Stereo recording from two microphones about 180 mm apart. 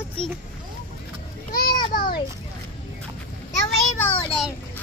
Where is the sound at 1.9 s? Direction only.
55° left (ahead or behind).